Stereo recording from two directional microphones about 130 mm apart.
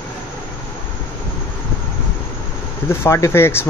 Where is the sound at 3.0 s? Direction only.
20° left (ahead or behind).